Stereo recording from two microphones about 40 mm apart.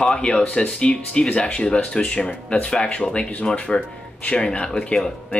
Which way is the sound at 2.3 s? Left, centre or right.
Left.